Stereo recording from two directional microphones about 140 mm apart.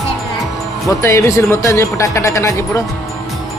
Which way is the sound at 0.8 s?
20° left (ahead or behind).